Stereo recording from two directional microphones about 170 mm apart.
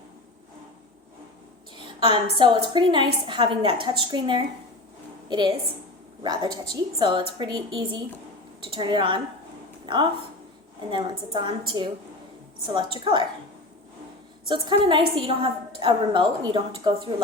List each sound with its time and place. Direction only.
2.0 s a woman's voice: 30° right (ahead or behind)
11.3 s a woman's voice: 25° right (ahead or behind)
12.6 s a woman's voice: 30° right (ahead or behind)
14.4 s a woman's voice: 30° right (ahead or behind)